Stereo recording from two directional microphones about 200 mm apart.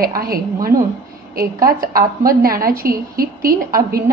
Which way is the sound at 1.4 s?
45° right (ahead or behind).